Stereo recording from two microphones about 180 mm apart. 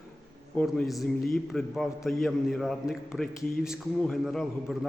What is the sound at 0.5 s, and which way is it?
A man's voice, 5° left (ahead or behind).